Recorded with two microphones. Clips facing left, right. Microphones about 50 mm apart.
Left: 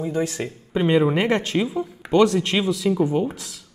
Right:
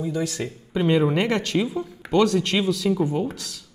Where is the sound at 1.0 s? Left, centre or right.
Centre.